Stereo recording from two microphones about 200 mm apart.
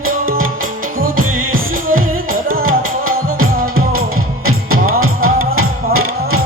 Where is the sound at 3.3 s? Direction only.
90° right.